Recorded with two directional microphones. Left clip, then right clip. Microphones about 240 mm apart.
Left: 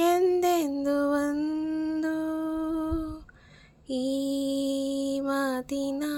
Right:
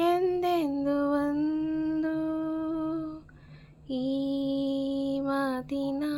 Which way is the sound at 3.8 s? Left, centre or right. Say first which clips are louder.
Left 2 dB; left.